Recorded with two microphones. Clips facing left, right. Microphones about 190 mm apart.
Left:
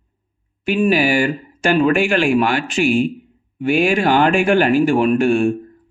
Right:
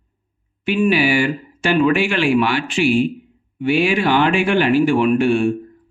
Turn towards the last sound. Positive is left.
turn(degrees=45)  # may be behind; listen again after turning